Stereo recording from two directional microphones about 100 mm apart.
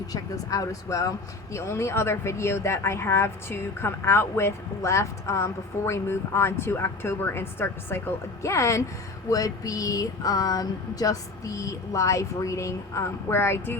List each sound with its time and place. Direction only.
0.1 s speech: 35° left (ahead or behind)